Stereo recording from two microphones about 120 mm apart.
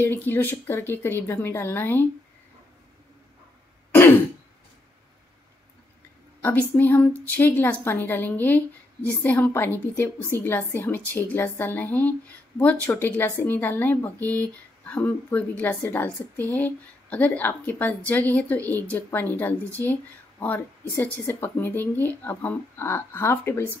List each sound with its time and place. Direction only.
0.0 s a woman's voice: 15° left (ahead or behind)
3.9 s throat clearing: 20° left (ahead or behind)
6.4 s speech: 15° left (ahead or behind)